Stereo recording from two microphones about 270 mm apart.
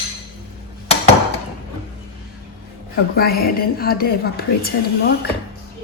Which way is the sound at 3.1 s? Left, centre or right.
Left.